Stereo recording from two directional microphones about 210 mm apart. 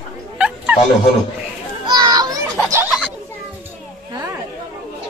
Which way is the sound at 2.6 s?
15° right (ahead or behind).